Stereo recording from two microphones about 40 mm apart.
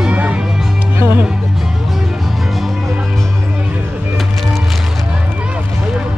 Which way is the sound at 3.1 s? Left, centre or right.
Centre.